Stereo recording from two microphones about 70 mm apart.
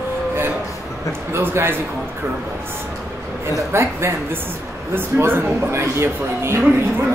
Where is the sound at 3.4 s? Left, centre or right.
Right.